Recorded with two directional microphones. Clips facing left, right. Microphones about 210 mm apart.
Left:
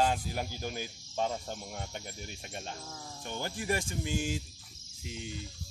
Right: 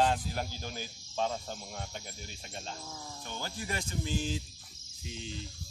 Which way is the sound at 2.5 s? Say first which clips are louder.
Right 1 dB; 10° left (ahead or behind).